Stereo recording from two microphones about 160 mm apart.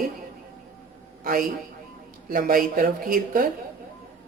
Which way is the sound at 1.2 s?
60° right (ahead or behind).